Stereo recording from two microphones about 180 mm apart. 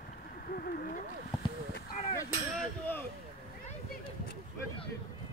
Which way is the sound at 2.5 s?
10° left (ahead or behind).